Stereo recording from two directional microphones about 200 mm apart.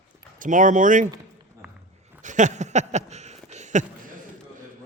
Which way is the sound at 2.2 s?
40° right (ahead or behind).